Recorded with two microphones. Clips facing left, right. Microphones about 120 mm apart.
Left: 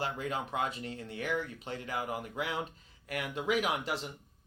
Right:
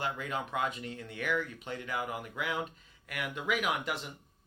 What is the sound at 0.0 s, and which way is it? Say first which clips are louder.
Speech: even; 35° left (ahead or behind).